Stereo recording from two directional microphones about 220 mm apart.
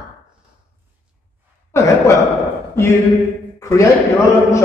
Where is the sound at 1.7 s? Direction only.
15° left (ahead or behind).